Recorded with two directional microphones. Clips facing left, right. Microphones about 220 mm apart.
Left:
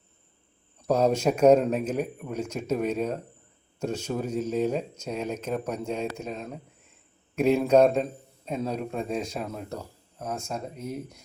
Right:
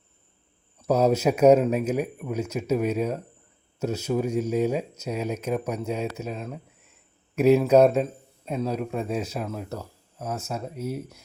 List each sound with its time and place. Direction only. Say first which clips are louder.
0.8 s a man's voice: right 2 dB; 5° right (ahead or behind)